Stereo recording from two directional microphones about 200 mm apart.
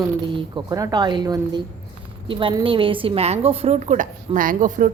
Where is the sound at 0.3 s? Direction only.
25° right (ahead or behind).